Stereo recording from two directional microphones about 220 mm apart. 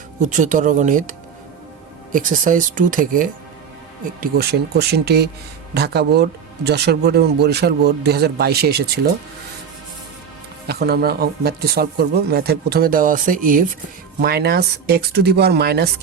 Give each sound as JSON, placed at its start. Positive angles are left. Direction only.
{"t": 0.2, "sound": "speech", "side_deg": -35}
{"t": 2.1, "sound": "speech", "side_deg": -35}
{"t": 10.7, "sound": "speech", "side_deg": -45}